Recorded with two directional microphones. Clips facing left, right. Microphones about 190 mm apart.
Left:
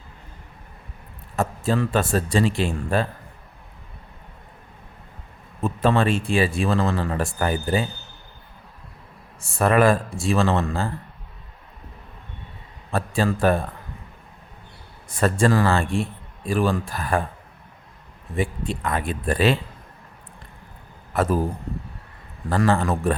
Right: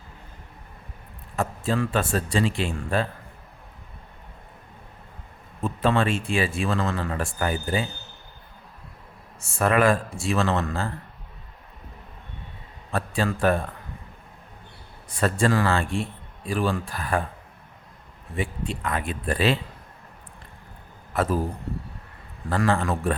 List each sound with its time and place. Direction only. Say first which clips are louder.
1.4 s speech: left 3 dB; 40° left (ahead or behind)
5.8 s speech: left 3 dB; 40° left (ahead or behind)
9.6 s speech: left 3 dB; 35° left (ahead or behind)
12.9 s speech: left 3 dB; 35° left (ahead or behind)
15.2 s speech: left 3 dB; 40° left (ahead or behind)
18.3 s speech: left 4 dB; 40° left (ahead or behind)
22.4 s speech: left 3 dB; 35° left (ahead or behind)